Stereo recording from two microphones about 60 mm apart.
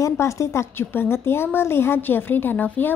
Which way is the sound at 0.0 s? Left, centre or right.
Left.